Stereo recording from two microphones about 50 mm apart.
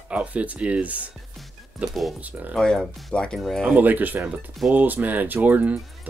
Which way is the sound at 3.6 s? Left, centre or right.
Right.